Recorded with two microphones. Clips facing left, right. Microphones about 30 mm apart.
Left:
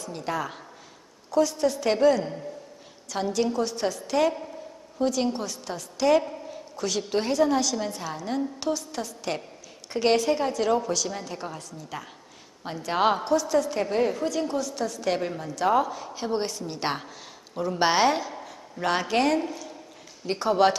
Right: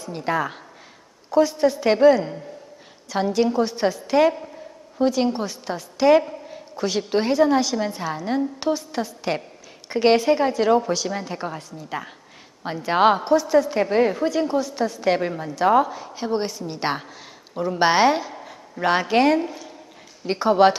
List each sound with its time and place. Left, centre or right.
0.0 s a woman's voice: right
6.2 s a woman's voice: centre